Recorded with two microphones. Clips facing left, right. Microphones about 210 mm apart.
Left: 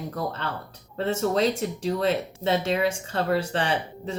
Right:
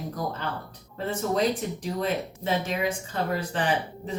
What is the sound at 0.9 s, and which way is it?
Speech, 80° left.